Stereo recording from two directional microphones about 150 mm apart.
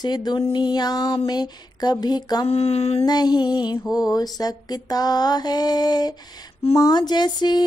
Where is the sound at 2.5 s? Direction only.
40° left (ahead or behind).